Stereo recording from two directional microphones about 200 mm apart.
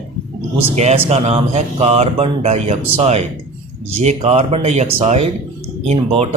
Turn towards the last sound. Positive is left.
turn(degrees=-30)  # may be behind; listen again after turning